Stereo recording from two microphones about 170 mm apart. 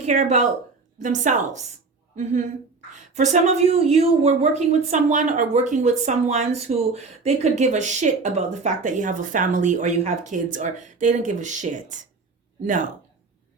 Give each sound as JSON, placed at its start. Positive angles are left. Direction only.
{"t": 0.0, "sound": "a woman's voice", "side_deg": -45}